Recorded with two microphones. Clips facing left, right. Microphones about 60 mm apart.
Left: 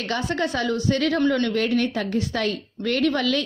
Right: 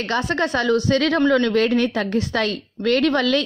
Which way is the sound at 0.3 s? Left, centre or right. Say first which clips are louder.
Right 5 dB; right.